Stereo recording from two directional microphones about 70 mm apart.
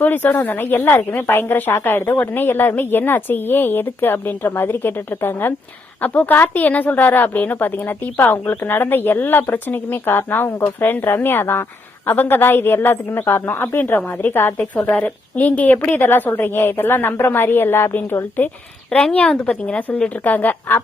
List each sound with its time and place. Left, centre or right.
0.0 s a woman's voice: left
18.9 s a woman's voice: centre